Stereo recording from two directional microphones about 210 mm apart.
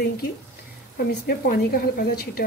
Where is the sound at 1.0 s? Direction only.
50° left (ahead or behind).